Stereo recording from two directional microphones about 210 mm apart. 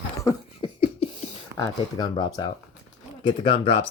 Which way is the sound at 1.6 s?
20° left (ahead or behind).